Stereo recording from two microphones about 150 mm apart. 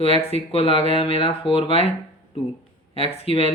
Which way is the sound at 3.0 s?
40° left (ahead or behind).